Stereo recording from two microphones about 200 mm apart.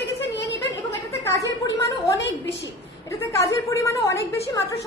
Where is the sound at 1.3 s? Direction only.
15° left (ahead or behind).